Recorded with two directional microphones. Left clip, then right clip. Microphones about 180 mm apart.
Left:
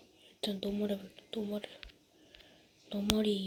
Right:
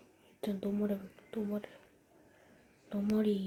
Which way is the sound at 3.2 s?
5° left (ahead or behind).